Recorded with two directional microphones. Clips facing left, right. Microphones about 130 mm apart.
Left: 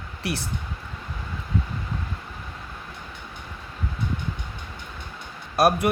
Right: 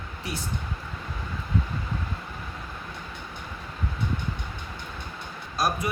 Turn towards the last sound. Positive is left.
turn(degrees=60)  # may be behind; listen again after turning